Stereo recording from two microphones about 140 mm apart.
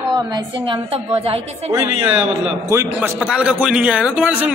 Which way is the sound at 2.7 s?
20° right (ahead or behind).